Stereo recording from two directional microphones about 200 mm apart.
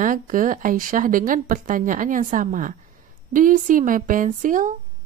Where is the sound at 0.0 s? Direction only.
40° right (ahead or behind).